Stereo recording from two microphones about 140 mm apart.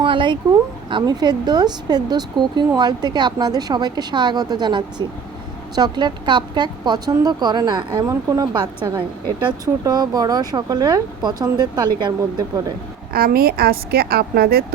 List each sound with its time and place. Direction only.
0.0 s speech: 35° right (ahead or behind)
8.1 s speech: 20° right (ahead or behind)
13.1 s a woman's voice: 90° right